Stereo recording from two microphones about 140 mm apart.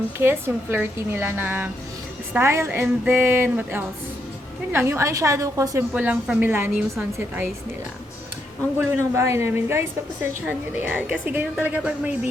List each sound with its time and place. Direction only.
0.2 s a woman's voice: 15° right (ahead or behind)
5.9 s a woman's voice: 10° right (ahead or behind)
8.8 s a woman's voice: 20° right (ahead or behind)